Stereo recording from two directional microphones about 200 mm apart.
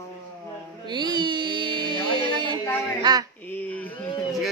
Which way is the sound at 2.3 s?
25° right (ahead or behind).